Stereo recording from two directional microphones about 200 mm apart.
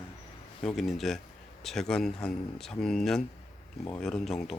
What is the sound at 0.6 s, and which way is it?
Speech, centre (ahead or behind).